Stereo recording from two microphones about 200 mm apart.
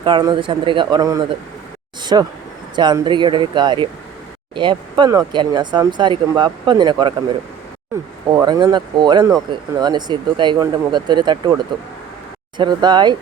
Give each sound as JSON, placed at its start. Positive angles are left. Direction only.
{"t": 0.0, "sound": "speech", "side_deg": -20}
{"t": 2.0, "sound": "insect", "side_deg": -20}
{"t": 2.7, "sound": "speech", "side_deg": -20}
{"t": 8.4, "sound": "speech", "side_deg": -20}